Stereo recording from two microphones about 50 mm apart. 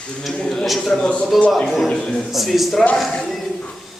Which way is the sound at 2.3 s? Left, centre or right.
Centre.